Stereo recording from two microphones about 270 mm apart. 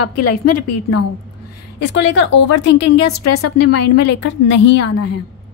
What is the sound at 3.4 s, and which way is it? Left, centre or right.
A woman's voice, left.